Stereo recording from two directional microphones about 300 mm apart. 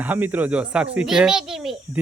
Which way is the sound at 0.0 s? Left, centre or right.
Centre.